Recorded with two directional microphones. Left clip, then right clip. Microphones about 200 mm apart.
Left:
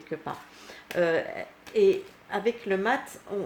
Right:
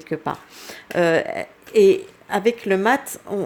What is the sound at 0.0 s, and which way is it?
Speech, 50° right (ahead or behind).